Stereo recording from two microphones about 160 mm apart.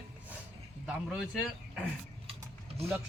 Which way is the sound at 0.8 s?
5° right (ahead or behind).